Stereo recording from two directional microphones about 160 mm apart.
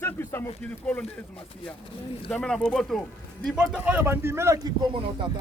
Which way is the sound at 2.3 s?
5° left (ahead or behind).